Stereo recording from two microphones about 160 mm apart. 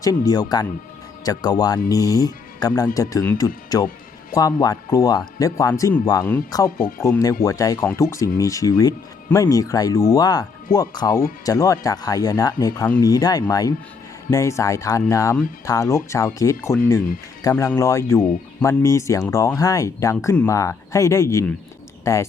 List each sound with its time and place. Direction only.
0.0 s speech: 25° left (ahead or behind)
6.7 s speech: 55° left (ahead or behind)
7.0 s speech: 20° left (ahead or behind)
17.7 s speech: 20° left (ahead or behind)